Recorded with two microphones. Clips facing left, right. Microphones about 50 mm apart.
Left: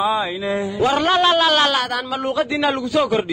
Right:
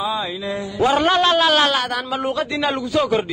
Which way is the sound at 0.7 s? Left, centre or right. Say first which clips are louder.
Right 1 dB; centre.